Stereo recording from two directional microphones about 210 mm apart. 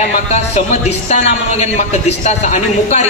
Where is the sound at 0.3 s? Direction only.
35° left (ahead or behind).